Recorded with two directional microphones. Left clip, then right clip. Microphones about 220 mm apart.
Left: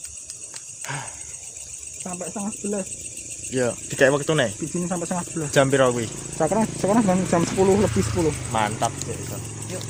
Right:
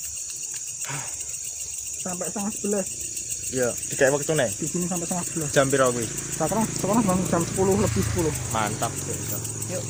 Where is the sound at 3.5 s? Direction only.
45° left (ahead or behind).